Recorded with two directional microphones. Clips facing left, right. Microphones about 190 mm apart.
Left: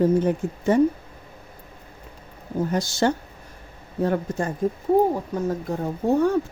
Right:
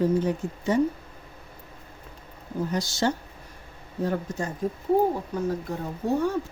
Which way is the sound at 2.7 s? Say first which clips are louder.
Left 4 dB; 50° left (ahead or behind).